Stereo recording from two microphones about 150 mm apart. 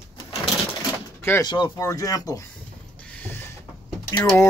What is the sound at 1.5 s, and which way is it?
Speech, 30° left (ahead or behind).